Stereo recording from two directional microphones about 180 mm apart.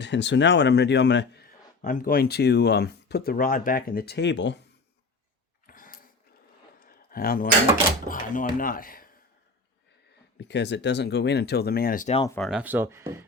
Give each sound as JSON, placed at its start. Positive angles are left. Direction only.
{"t": 0.0, "sound": "speech", "side_deg": 80}
{"t": 1.8, "sound": "speech", "side_deg": 50}
{"t": 5.6, "sound": "dog", "side_deg": 50}
{"t": 6.7, "sound": "a sound", "side_deg": 55}
{"t": 8.0, "sound": "speech", "side_deg": 45}
{"t": 10.3, "sound": "speech", "side_deg": 75}
{"t": 12.4, "sound": "speech", "side_deg": -5}